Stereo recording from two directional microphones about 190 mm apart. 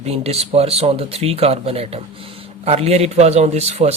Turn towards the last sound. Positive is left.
turn(degrees=-35)  # may be behind; listen again after turning